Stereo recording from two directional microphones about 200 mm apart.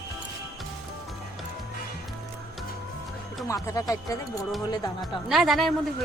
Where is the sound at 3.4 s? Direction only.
15° left (ahead or behind).